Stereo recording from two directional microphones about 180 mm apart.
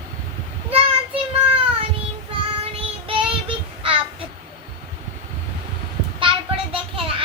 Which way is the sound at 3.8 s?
30° right (ahead or behind).